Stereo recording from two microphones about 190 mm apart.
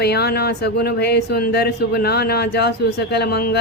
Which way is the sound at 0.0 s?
55° left (ahead or behind).